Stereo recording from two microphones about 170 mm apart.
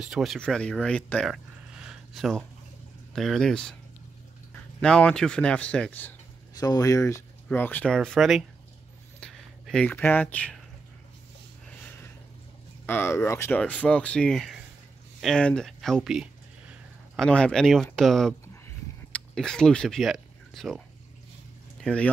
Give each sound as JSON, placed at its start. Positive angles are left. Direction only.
{"t": 0.0, "sound": "speech", "side_deg": 0}
{"t": 4.8, "sound": "speech", "side_deg": 5}
{"t": 6.6, "sound": "speech", "side_deg": 20}
{"t": 9.2, "sound": "a sound", "side_deg": 5}
{"t": 12.8, "sound": "speech", "side_deg": 15}
{"t": 21.8, "sound": "speech", "side_deg": 5}